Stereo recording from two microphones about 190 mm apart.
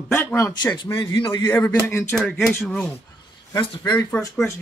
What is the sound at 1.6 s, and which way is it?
Speech, 10° left (ahead or behind).